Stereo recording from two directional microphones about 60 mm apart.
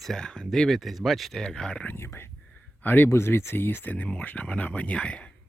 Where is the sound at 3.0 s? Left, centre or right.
Left.